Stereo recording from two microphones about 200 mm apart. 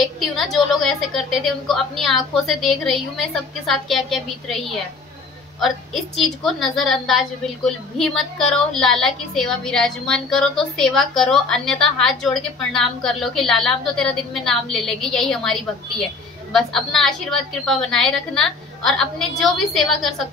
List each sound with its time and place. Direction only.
0.0 s a woman's voice: centre (ahead or behind)